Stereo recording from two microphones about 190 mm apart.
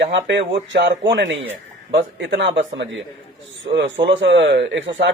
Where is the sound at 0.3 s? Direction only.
65° right (ahead or behind).